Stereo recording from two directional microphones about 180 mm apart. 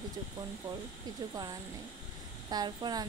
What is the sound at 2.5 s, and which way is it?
Speech, 20° right (ahead or behind).